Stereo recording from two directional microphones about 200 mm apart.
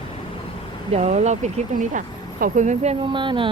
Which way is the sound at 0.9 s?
35° right (ahead or behind).